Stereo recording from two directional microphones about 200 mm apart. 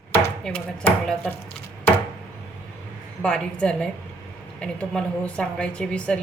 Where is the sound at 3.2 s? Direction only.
5° left (ahead or behind).